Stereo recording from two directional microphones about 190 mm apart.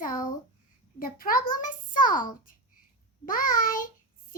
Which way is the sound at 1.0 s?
50° left (ahead or behind).